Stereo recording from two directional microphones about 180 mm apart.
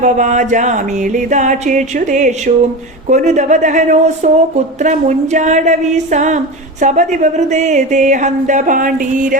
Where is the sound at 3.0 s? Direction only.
40° right (ahead or behind).